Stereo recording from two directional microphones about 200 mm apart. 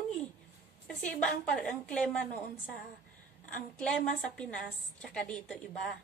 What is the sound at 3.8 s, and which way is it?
A woman's voice, 5° left (ahead or behind).